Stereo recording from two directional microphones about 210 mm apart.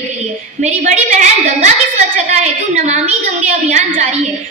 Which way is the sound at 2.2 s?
30° right (ahead or behind).